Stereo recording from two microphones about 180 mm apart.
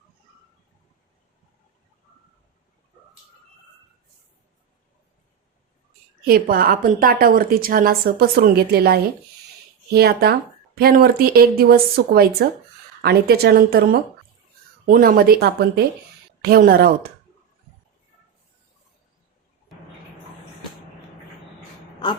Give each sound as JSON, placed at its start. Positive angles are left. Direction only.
{"t": 6.2, "sound": "a woman's voice", "side_deg": -55}